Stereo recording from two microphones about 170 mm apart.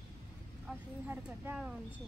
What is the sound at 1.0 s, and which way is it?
Speech, 10° right (ahead or behind).